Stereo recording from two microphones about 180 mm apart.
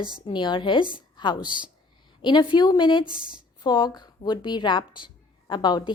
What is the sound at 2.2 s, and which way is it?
Speech, 25° left (ahead or behind).